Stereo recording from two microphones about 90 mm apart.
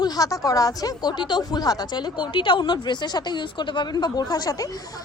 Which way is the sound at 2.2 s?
65° left (ahead or behind).